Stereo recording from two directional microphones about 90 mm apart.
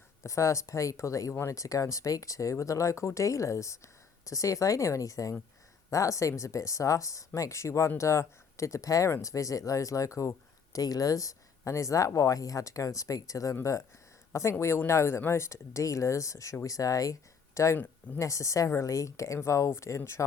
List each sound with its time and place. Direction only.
0.2 s speech: 35° left (ahead or behind)